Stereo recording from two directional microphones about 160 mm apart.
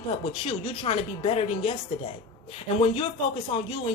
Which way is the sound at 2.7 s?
40° left (ahead or behind).